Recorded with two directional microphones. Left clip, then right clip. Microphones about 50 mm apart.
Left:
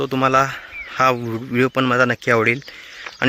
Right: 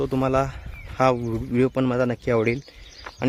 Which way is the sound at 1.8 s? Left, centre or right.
Right.